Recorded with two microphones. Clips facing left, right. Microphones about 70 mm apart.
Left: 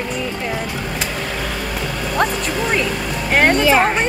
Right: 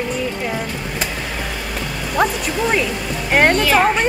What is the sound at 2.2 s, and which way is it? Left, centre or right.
Speech, centre.